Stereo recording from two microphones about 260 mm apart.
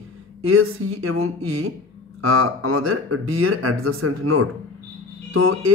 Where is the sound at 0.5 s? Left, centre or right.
Right.